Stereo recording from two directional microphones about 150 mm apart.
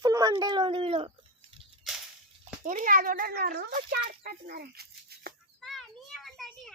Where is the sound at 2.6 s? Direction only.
60° right (ahead or behind); by 5.3 s 90° right.